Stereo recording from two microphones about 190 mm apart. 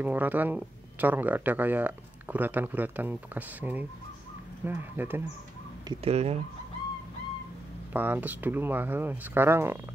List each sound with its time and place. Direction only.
0.0 s speech: 10° right (ahead or behind)
5.9 s speech: 30° right (ahead or behind)
7.9 s speech: 10° right (ahead or behind)